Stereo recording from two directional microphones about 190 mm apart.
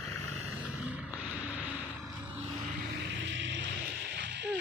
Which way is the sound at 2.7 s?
60° right (ahead or behind).